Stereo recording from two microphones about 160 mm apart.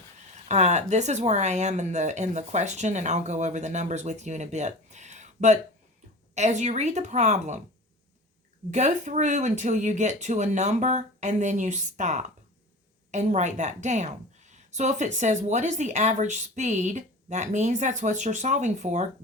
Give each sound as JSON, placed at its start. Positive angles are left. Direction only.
{"t": 0.4, "sound": "a woman's voice", "side_deg": -45}
{"t": 8.7, "sound": "a woman's voice", "side_deg": -50}